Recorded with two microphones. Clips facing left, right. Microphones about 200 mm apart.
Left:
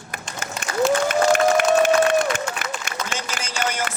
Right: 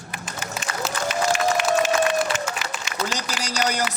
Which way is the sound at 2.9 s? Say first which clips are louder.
Even; 55° left (ahead or behind).